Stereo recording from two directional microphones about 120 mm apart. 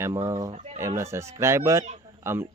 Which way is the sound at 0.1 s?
25° right (ahead or behind).